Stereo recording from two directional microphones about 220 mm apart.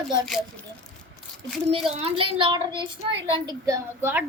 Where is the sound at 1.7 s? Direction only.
25° right (ahead or behind).